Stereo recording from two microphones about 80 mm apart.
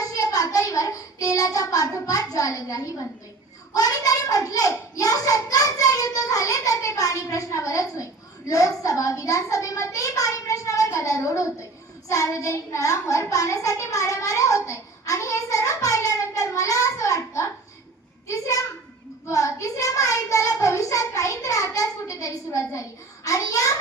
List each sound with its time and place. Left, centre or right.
0.0 s child singing: left
3.8 s a child's voice: left